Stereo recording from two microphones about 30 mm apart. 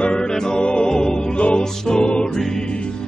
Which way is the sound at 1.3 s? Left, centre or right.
Left.